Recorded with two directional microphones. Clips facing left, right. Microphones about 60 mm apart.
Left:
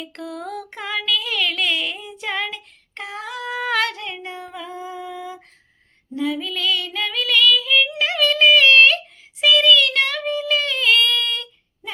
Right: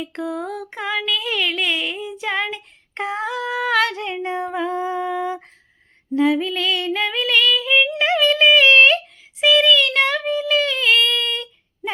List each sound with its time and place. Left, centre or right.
0.0 s a sound: centre
2.9 s female singing: right
3.2 s singing: centre
3.9 s a sound: right
6.1 s female singing: right
6.5 s female singing: right
7.9 s a sound: centre
9.4 s child singing: right
10.2 s child singing: centre